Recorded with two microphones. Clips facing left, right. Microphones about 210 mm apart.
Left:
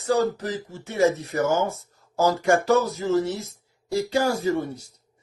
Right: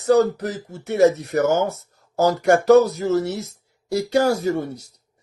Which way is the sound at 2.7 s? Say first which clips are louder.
Right 8 dB; 70° right (ahead or behind).